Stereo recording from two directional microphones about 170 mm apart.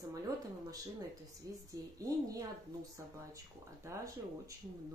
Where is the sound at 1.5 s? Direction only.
20° right (ahead or behind).